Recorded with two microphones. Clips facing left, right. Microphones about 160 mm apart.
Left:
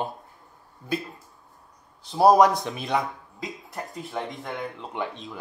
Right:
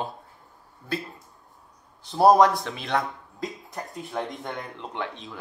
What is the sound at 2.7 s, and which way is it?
Speech, 20° left (ahead or behind).